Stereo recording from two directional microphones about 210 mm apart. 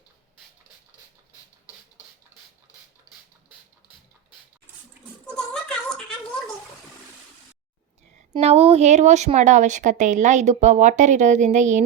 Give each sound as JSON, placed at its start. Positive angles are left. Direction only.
{"t": 8.4, "sound": "a woman's voice", "side_deg": -30}